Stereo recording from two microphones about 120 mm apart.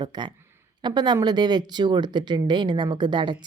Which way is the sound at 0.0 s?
35° right (ahead or behind).